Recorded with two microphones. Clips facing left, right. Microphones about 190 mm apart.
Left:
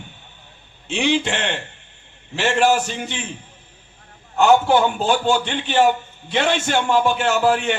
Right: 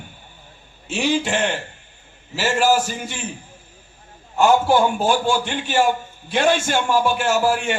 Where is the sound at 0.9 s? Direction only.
5° right (ahead or behind).